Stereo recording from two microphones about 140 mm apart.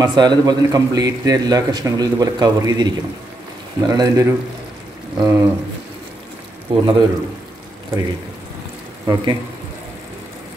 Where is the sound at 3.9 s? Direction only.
25° right (ahead or behind).